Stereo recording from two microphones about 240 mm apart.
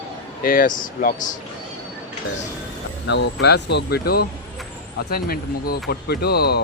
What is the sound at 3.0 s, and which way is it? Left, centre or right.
Speech, left.